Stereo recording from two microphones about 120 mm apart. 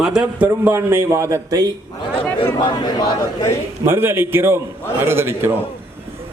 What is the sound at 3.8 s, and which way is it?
A man's voice, 20° right (ahead or behind).